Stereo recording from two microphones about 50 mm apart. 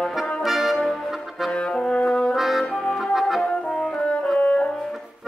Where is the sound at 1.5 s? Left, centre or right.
Centre.